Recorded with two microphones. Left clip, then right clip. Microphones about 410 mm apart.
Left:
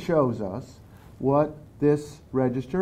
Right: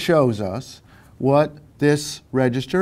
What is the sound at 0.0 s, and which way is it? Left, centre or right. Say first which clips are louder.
Speech: right 6 dB; right.